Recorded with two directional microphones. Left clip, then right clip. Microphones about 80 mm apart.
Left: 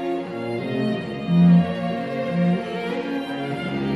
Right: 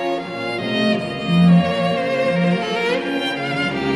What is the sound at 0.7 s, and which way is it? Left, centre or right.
Music, left.